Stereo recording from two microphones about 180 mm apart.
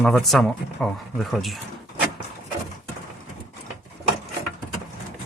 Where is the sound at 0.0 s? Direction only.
Centre (ahead or behind).